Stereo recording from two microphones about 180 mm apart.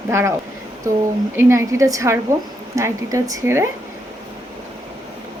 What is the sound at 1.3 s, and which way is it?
A woman's voice, 15° right (ahead or behind).